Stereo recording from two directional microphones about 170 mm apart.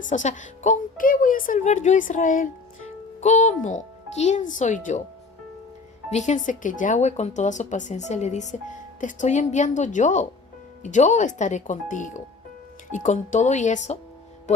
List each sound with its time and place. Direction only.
0.1 s speech: 45° left (ahead or behind)
6.1 s speech: 45° left (ahead or behind)